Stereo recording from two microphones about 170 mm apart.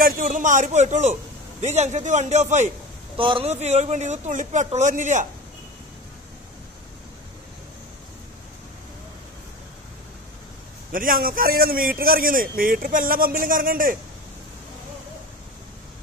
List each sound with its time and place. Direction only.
0.0 s speech: 55° right (ahead or behind)
3.2 s speech: 30° right (ahead or behind); by 5.3 s 45° right (ahead or behind)
10.9 s a man's voice: 55° right (ahead or behind)